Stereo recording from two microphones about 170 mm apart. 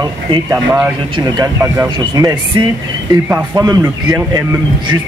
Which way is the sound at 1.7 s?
20° right (ahead or behind).